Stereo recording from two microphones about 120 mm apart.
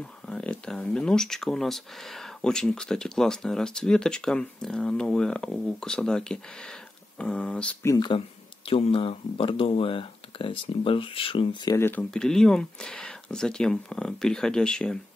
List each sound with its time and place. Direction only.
0.0 s speech: 10° left (ahead or behind)
8.6 s speech: 50° left (ahead or behind)
11.8 s speech: 15° left (ahead or behind)